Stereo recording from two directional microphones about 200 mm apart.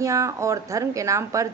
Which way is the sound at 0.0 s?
15° right (ahead or behind).